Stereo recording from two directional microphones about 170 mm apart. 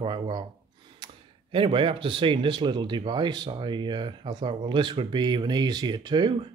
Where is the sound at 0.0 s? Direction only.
30° right (ahead or behind).